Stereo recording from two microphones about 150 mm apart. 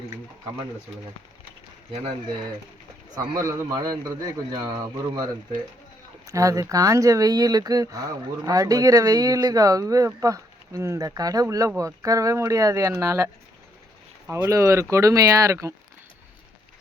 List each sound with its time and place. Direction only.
3.2 s speech: 25° right (ahead or behind)
6.2 s speech: 20° right (ahead or behind)